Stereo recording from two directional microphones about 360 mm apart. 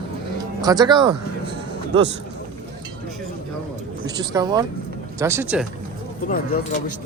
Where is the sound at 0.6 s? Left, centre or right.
Centre.